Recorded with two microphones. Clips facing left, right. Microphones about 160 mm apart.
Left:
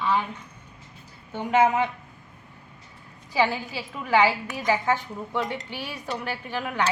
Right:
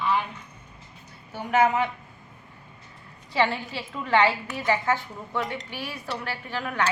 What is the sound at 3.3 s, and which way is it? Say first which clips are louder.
A woman's voice: left 1 dB; 5° left (ahead or behind).